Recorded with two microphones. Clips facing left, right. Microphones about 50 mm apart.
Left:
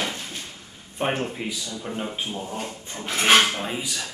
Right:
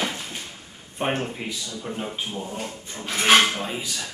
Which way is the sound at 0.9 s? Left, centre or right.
Centre.